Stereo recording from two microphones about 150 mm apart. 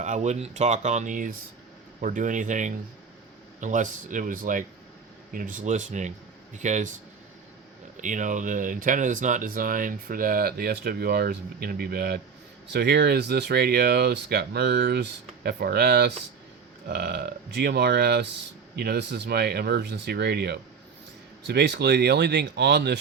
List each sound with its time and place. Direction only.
0.0 s speech: 50° right (ahead or behind)
8.0 s speech: 55° right (ahead or behind); by 22.9 s 90° right